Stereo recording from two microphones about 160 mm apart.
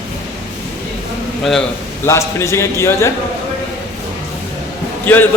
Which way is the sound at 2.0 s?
15° left (ahead or behind).